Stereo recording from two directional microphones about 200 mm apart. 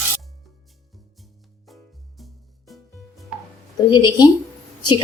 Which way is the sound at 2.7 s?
Centre (ahead or behind).